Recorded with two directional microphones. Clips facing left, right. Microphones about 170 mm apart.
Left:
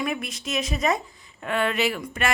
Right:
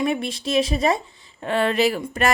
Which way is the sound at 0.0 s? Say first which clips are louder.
Right 6 dB; 30° right (ahead or behind).